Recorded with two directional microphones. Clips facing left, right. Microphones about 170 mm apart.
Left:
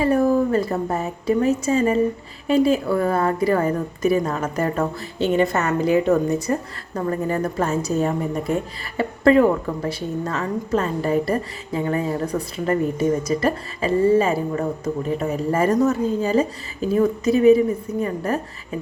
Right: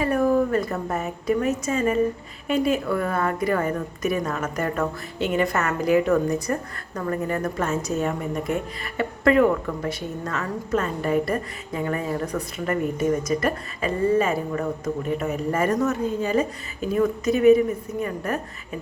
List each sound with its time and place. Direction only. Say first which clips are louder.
0.0 s a woman's voice: left 3 dB; 30° left (ahead or behind)